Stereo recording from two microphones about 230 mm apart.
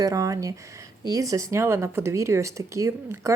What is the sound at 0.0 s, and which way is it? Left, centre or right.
Speech, centre.